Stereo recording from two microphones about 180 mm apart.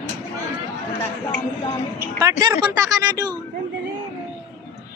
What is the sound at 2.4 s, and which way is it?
Speech, 15° right (ahead or behind).